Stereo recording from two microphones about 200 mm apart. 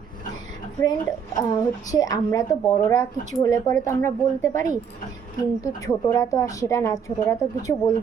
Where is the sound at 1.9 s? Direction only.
20° left (ahead or behind).